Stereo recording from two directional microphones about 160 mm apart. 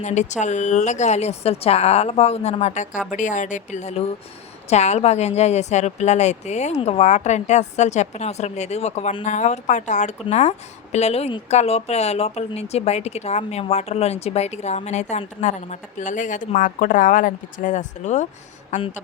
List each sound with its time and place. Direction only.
0.0 s a woman's voice: 50° left (ahead or behind)